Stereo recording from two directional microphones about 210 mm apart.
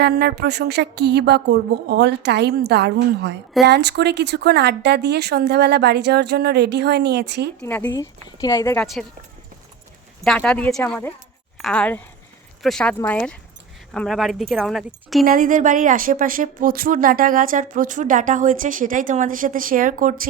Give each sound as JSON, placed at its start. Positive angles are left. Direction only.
{"t": 0.0, "sound": "speech", "side_deg": -50}
{"t": 7.6, "sound": "a woman's voice", "side_deg": 10}
{"t": 10.2, "sound": "a woman's voice", "side_deg": 5}
{"t": 15.2, "sound": "speech", "side_deg": -45}